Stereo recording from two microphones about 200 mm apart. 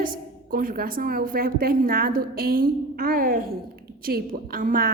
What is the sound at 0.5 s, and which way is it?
A woman's voice, 45° right (ahead or behind).